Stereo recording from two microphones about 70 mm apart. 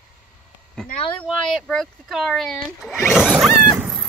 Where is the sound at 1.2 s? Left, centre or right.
Centre.